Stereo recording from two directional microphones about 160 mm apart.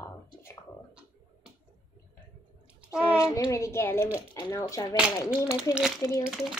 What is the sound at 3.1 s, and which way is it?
A child's voice, 20° left (ahead or behind).